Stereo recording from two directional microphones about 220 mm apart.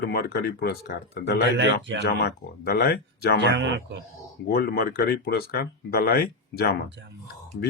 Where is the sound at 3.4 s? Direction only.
50° right (ahead or behind).